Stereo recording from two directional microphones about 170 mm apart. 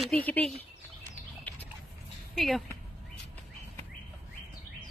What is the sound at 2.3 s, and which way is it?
Speech, centre (ahead or behind).